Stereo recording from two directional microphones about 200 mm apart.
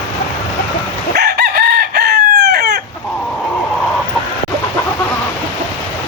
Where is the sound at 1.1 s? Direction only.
55° right (ahead or behind).